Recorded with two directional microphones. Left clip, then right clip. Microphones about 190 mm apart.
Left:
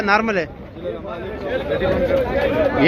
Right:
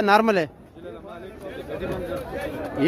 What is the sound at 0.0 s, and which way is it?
Speech, 40° right (ahead or behind).